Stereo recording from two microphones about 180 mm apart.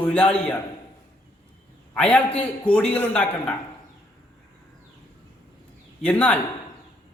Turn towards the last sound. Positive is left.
turn(degrees=5)  # may be behind; listen again after turning